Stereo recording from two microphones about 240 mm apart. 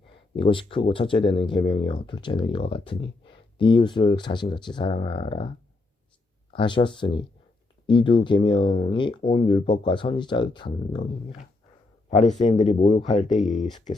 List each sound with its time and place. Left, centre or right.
0.3 s speech: left
6.5 s speech: left
13.3 s speech: centre